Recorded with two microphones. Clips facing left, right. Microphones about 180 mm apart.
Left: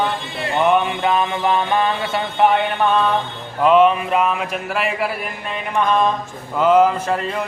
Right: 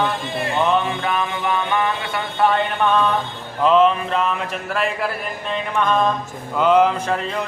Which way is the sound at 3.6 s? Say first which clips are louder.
Left 2 dB; 10° left (ahead or behind).